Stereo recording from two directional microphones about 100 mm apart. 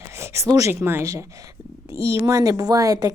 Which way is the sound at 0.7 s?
25° right (ahead or behind).